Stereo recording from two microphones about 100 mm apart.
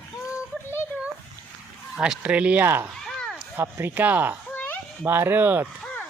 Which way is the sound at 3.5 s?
20° right (ahead or behind).